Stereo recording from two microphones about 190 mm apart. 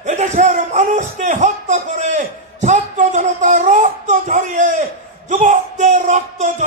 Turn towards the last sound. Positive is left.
turn(degrees=-40)  # may be behind; listen again after turning